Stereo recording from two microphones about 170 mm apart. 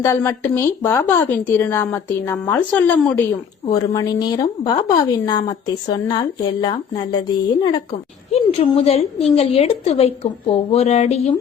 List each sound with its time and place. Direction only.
0.0 s a woman's voice: 15° left (ahead or behind)
3.9 s a woman's voice: 25° left (ahead or behind)
8.3 s speech: 35° left (ahead or behind)